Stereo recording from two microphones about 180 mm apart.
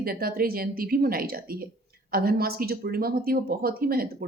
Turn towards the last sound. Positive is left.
turn(degrees=-55)  # may be behind; listen again after turning